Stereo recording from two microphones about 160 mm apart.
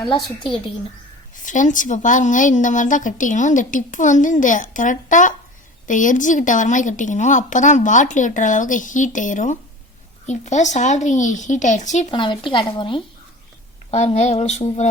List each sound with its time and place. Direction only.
1.4 s a woman's voice: 50° left (ahead or behind)
12.1 s speech: 30° left (ahead or behind)
13.9 s a woman's voice: 45° left (ahead or behind)